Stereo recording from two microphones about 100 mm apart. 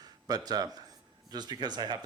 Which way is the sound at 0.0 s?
40° right (ahead or behind).